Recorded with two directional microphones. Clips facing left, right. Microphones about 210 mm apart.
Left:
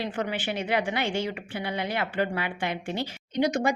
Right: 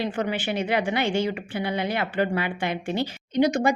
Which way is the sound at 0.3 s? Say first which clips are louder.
Right 3 dB; 15° right (ahead or behind).